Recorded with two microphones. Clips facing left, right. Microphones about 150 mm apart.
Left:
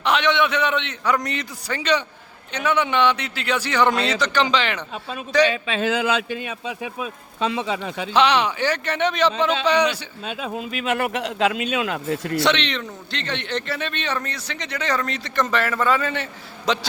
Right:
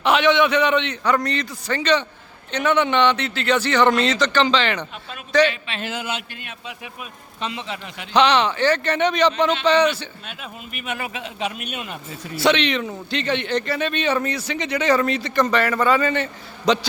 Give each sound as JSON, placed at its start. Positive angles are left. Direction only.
{"t": 0.0, "sound": "a man's voice", "side_deg": -5}
{"t": 8.1, "sound": "a man's voice", "side_deg": 5}
{"t": 10.8, "sound": "speech", "side_deg": 80}
{"t": 12.4, "sound": "a man's voice", "side_deg": -5}